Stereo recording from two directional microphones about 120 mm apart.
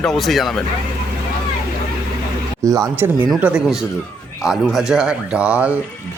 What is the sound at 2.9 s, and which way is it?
Speech, 15° right (ahead or behind).